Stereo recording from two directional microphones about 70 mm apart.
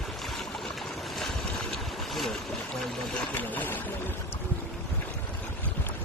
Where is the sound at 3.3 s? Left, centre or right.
Left.